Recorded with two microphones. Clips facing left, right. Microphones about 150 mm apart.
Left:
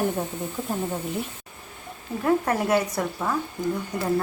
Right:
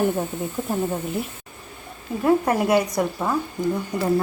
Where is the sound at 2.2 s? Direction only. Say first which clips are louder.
Right 3 dB; 10° right (ahead or behind).